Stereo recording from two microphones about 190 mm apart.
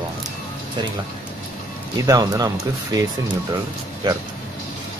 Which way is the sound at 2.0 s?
20° right (ahead or behind).